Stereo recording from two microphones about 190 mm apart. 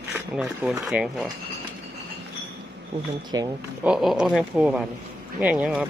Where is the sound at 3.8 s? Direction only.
5° right (ahead or behind).